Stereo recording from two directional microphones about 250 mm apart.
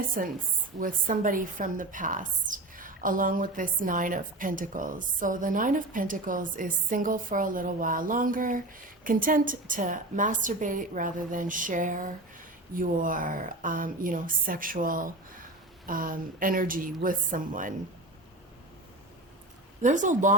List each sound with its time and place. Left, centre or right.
0.2 s a woman's voice: right
19.8 s speech: right